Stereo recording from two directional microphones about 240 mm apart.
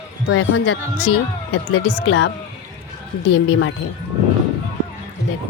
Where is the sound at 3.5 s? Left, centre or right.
Left.